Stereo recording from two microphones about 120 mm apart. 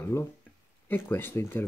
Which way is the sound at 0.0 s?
20° left (ahead or behind).